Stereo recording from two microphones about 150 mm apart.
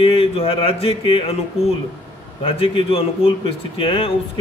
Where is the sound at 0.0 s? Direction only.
40° left (ahead or behind).